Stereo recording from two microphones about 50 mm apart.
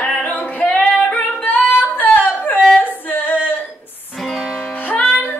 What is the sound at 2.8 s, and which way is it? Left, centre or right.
Female singing, left.